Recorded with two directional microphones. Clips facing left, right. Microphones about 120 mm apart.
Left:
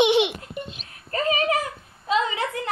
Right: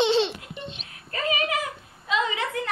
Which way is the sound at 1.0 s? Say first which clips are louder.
Left 4 dB; 35° left (ahead or behind).